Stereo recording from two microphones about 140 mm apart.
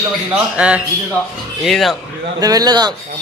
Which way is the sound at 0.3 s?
10° right (ahead or behind).